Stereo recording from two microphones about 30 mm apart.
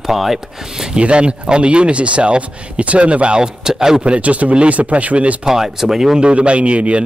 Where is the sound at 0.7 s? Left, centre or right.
Right.